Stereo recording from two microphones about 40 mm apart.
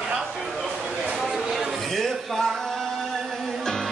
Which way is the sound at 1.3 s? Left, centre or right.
Centre.